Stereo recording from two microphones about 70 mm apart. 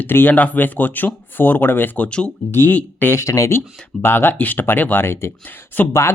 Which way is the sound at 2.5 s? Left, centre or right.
Left.